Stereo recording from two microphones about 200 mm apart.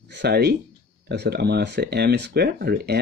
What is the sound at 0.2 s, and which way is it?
Speech, 55° right (ahead or behind).